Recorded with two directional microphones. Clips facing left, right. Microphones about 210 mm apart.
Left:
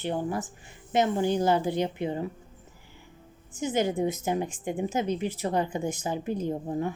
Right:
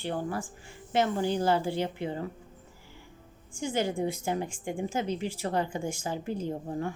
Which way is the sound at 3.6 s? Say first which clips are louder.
Left 3 dB; 20° left (ahead or behind).